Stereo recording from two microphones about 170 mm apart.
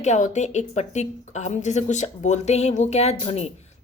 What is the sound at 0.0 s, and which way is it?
A woman's voice, 45° left (ahead or behind).